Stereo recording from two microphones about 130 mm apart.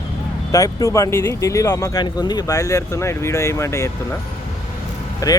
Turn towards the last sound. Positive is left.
turn(degrees=25)  # may be behind; listen again after turning